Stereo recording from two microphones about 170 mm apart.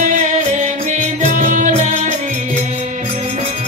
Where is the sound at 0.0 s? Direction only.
45° right (ahead or behind).